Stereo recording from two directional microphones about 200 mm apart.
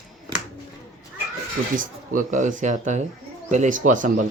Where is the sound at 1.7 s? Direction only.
40° right (ahead or behind).